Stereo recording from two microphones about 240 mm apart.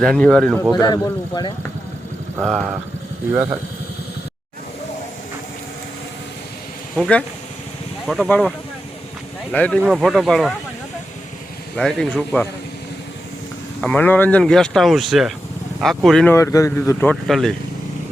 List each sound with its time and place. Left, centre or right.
0.0 s speech: centre
0.7 s a man's voice: centre
2.4 s speech: centre
6.9 s speech: centre
11.8 s speech: centre
13.8 s speech: centre